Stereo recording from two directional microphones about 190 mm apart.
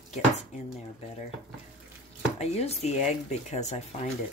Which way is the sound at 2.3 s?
35° left (ahead or behind).